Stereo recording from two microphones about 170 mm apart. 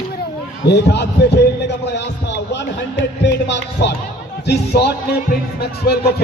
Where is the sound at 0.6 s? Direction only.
80° left.